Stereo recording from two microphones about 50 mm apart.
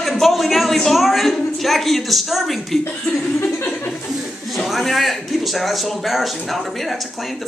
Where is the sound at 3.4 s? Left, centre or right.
Left.